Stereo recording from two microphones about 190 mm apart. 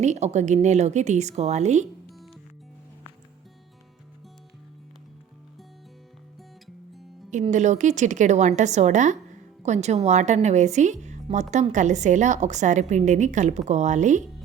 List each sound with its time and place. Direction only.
0.0 s a woman's voice: 35° right (ahead or behind)
2.0 s music: centre (ahead or behind)
7.5 s a woman's voice: 40° right (ahead or behind)